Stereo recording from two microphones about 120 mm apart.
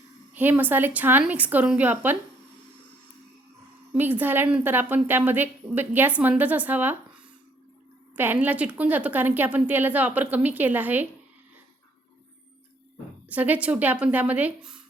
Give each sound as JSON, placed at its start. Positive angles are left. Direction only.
{"t": 0.3, "sound": "a woman's voice", "side_deg": -15}
{"t": 3.9, "sound": "a woman's voice", "side_deg": -15}
{"t": 13.2, "sound": "a woman's voice", "side_deg": -15}